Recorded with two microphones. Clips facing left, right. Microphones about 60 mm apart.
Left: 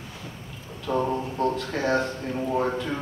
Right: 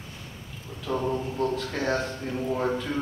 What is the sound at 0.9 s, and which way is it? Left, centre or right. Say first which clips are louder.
A man's voice: left 2 dB; centre.